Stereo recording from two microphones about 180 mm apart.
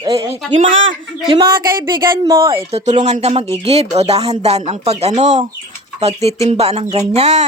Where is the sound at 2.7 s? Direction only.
35° right (ahead or behind).